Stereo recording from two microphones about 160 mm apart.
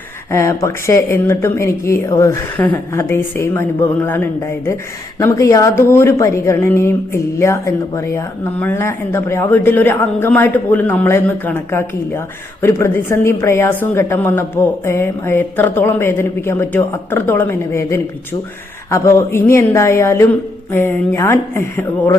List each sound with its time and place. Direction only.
0.3 s speech: 15° left (ahead or behind)